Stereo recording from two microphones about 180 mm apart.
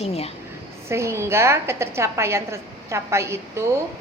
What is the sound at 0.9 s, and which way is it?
A woman's voice, 15° right (ahead or behind).